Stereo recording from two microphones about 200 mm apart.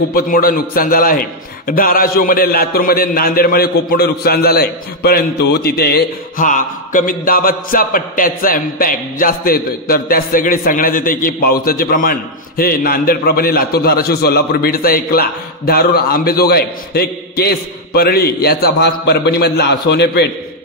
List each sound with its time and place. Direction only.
0.1 s a man's voice: 45° left (ahead or behind)